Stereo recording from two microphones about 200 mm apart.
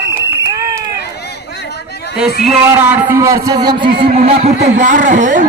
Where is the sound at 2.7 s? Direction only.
10° right (ahead or behind); by 4.1 s 25° right (ahead or behind).